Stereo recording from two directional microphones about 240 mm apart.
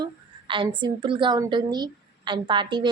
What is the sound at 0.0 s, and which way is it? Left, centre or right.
A woman's voice, right.